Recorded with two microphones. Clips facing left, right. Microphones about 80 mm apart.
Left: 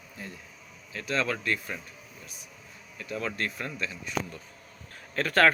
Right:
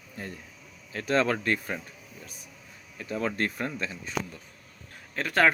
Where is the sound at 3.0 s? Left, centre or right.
Right.